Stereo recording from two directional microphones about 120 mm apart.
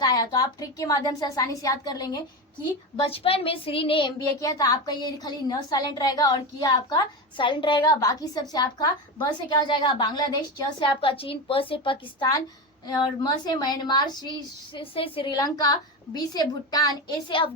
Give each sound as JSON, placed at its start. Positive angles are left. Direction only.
{"t": 0.0, "sound": "a woman's voice", "side_deg": 35}
{"t": 3.0, "sound": "a woman's voice", "side_deg": 50}
{"t": 4.4, "sound": "a woman's voice", "side_deg": 30}
{"t": 8.0, "sound": "a woman's voice", "side_deg": 30}
{"t": 12.8, "sound": "a woman's voice", "side_deg": 35}
{"t": 15.4, "sound": "a woman's voice", "side_deg": 30}
{"t": 17.2, "sound": "a woman's voice", "side_deg": 45}